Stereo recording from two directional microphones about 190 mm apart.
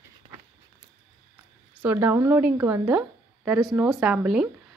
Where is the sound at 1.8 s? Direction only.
10° right (ahead or behind).